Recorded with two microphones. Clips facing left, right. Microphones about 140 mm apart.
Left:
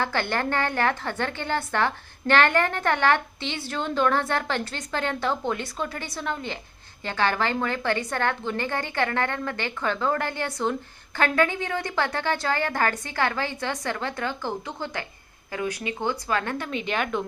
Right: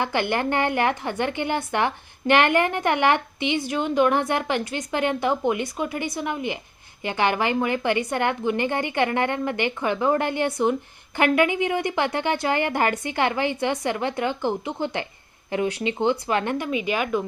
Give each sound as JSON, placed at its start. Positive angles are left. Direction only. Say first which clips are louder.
{"t": 0.0, "sound": "a woman's voice", "louder": "right 3 dB", "side_deg": -15}